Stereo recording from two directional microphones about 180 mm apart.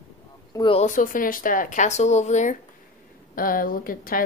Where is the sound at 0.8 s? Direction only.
45° left (ahead or behind).